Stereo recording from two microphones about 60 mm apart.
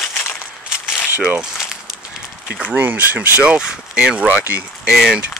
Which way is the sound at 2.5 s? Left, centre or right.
Centre.